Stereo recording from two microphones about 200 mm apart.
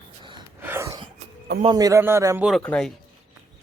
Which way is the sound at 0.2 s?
25° right (ahead or behind).